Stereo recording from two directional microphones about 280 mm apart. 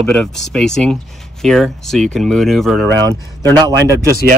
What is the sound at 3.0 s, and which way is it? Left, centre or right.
Speech, right.